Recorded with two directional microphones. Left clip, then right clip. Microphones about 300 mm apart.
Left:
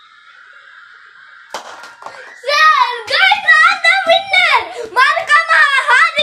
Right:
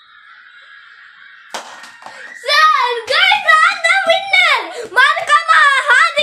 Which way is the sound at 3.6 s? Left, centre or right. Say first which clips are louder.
Left 2 dB; centre.